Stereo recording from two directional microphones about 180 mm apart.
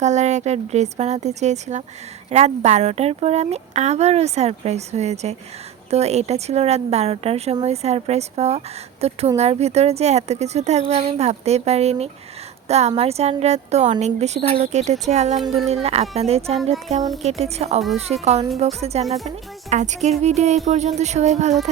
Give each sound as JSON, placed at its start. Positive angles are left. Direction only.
{"t": 0.0, "sound": "a woman's voice", "side_deg": -40}
{"t": 19.0, "sound": "speech", "side_deg": 0}
{"t": 19.7, "sound": "speech", "side_deg": -40}